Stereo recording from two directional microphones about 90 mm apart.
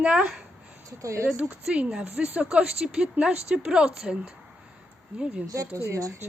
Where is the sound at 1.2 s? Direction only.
10° right (ahead or behind).